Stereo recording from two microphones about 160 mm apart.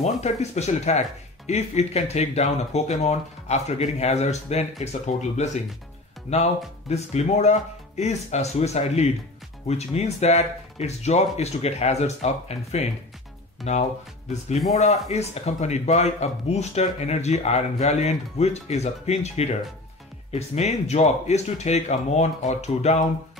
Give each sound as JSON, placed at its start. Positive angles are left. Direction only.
{"t": 0.0, "sound": "speech", "side_deg": 45}